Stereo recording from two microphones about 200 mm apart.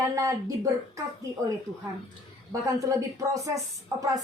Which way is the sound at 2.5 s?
15° right (ahead or behind).